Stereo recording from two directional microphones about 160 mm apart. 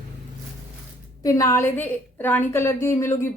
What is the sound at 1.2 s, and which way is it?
A woman's voice, 20° left (ahead or behind).